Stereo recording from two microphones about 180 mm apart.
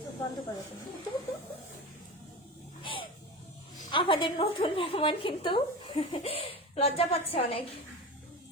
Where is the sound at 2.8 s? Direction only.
30° left (ahead or behind).